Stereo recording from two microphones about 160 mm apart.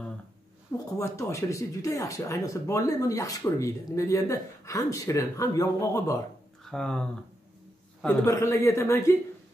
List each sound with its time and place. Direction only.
0.8 s speech: 20° left (ahead or behind)
6.6 s speech: 5° left (ahead or behind)
8.3 s speech: 20° left (ahead or behind)